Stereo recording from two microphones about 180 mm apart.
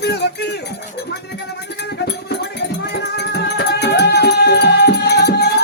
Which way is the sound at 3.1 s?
65° left (ahead or behind).